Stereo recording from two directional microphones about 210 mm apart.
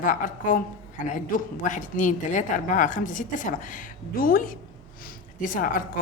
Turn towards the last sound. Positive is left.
turn(degrees=40)  # may be behind; listen again after turning